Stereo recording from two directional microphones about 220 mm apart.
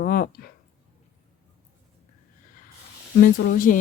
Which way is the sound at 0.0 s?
40° left (ahead or behind).